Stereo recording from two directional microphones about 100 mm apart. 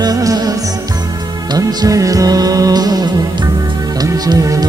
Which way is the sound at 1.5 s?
35° right (ahead or behind).